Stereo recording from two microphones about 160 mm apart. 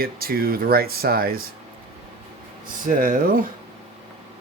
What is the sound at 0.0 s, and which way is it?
Speech, 70° right (ahead or behind).